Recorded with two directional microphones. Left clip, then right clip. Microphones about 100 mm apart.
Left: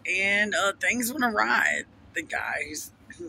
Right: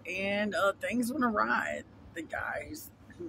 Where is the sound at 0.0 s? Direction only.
20° right (ahead or behind).